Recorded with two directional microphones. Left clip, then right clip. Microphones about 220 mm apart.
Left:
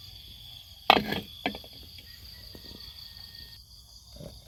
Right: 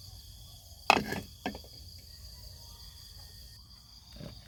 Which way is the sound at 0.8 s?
25° left (ahead or behind).